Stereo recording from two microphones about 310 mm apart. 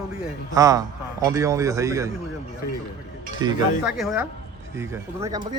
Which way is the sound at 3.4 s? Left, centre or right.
Centre.